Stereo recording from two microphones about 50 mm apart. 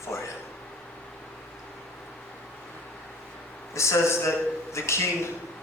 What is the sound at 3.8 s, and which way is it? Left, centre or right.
A man's voice, left.